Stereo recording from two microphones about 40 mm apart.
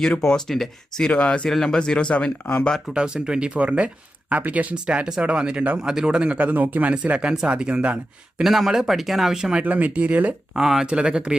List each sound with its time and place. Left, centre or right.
0.2 s speech: centre
1.1 s speech: left
1.5 s speech: centre; by 2.3 s left
2.9 s speech: right
3.6 s speech: right
4.7 s speech: right
6.4 s speech: right
7.2 s speech: right
8.4 s speech: centre
9.4 s speech: right
9.6 s speech: right
10.5 s speech: centre
10.8 s speech: right